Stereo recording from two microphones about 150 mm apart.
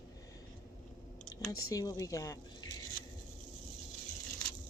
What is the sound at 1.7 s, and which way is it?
Speech, 25° left (ahead or behind).